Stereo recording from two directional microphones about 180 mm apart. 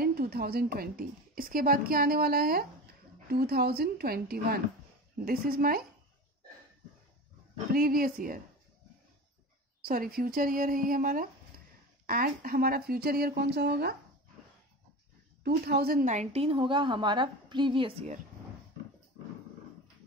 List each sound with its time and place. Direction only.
0.0 s a woman's voice: 60° right (ahead or behind)
7.7 s speech: 55° right (ahead or behind)
9.8 s speech: 55° right (ahead or behind)
15.4 s a woman's voice: 60° right (ahead or behind); by 18.1 s 30° right (ahead or behind)